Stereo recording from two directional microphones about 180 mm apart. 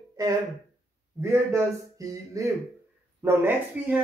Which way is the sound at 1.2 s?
15° right (ahead or behind).